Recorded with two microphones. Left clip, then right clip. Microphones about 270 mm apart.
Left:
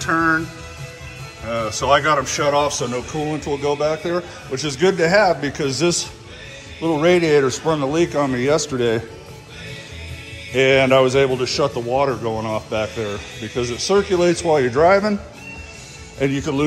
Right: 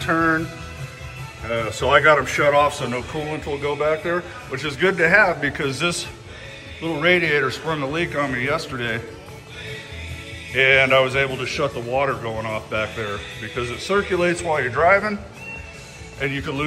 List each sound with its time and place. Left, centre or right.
0.0 s music: centre
2.1 s a man's voice: centre
10.5 s a man's voice: centre
16.2 s a man's voice: centre